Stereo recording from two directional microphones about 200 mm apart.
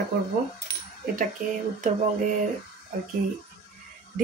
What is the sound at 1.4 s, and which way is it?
Speech, 45° right (ahead or behind).